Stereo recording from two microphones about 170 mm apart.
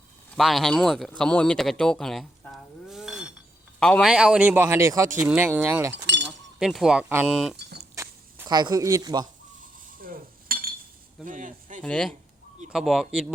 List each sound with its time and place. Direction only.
0.3 s a man's voice: centre (ahead or behind)
6.2 s chink: 5° right (ahead or behind)
7.1 s a man's voice: 15° right (ahead or behind)
7.5 s a sound: 75° right (ahead or behind)
7.9 s speech: 20° right (ahead or behind)
9.8 s dishes: 55° right (ahead or behind)
11.3 s speech: 50° right (ahead or behind)
11.8 s speech: 5° left (ahead or behind)